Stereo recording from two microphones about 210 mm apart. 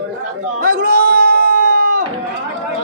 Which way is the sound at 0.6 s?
45° right (ahead or behind).